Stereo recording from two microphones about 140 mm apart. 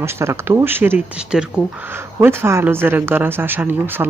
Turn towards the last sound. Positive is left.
turn(degrees=-15)  # may be behind; listen again after turning